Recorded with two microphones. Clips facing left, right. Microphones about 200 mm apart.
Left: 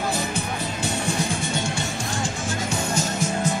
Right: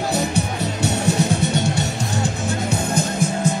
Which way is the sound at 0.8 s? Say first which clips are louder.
Right 6 dB; 65° right (ahead or behind).